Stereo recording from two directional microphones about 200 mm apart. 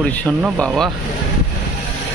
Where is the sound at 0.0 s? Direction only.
5° left (ahead or behind).